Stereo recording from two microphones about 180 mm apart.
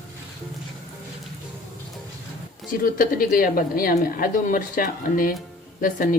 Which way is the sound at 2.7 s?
50° left (ahead or behind).